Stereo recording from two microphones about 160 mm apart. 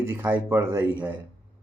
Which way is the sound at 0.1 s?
15° right (ahead or behind).